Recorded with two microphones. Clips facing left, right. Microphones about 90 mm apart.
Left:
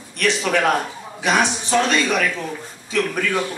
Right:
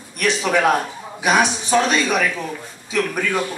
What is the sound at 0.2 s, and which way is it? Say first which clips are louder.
A man's voice: right 1 dB; 15° right (ahead or behind).